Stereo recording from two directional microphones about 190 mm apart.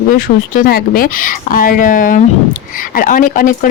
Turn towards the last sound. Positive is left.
turn(degrees=45)  # may be behind; listen again after turning